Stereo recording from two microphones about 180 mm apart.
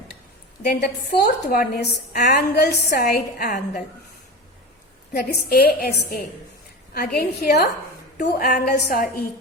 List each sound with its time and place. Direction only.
0.7 s a woman's voice: 60° left (ahead or behind)
5.1 s a woman's voice: 60° left (ahead or behind)